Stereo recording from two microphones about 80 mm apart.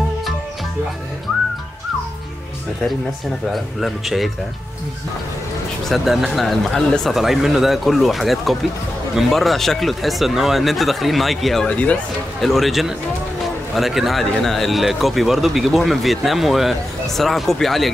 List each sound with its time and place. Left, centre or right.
3.5 s speech: centre
5.9 s speech: centre
11.6 s speech: centre
12.4 s speech: centre